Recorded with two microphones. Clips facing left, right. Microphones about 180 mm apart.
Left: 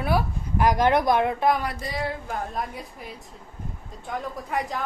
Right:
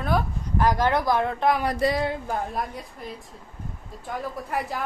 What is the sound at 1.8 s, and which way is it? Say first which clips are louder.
Speech: right 11 dB; 75° right (ahead or behind).